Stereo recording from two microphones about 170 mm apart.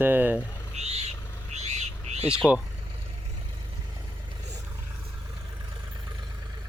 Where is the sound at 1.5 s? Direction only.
40° right (ahead or behind).